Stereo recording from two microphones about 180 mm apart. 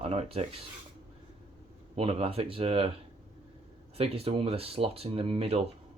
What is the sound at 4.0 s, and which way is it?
Speech, 35° right (ahead or behind).